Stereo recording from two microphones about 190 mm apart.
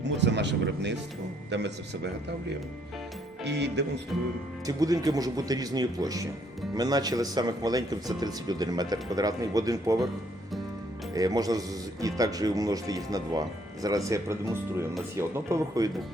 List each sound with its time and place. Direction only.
0.2 s speech: 65° right (ahead or behind)
3.4 s speech: 65° right (ahead or behind)
4.6 s speech: 20° right (ahead or behind)
11.1 s speech: 20° right (ahead or behind)